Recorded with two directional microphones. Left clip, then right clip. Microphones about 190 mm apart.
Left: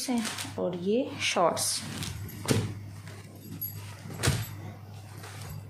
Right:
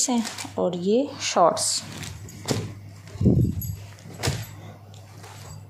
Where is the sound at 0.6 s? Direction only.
30° right (ahead or behind).